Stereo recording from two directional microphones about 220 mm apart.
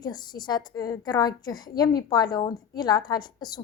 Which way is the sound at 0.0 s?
20° left (ahead or behind).